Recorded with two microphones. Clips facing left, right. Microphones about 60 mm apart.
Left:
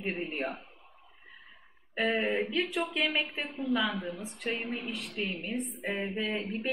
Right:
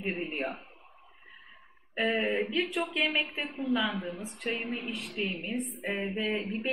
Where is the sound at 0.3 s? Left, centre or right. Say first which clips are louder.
Even; centre.